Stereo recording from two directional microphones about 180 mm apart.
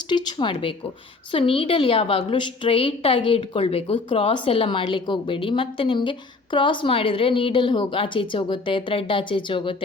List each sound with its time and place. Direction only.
0.1 s a woman's voice: 25° left (ahead or behind)